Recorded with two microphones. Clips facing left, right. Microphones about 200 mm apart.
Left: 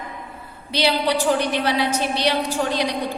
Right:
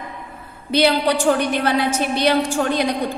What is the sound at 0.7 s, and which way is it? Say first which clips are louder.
A woman's voice: right 4 dB; 55° right (ahead or behind).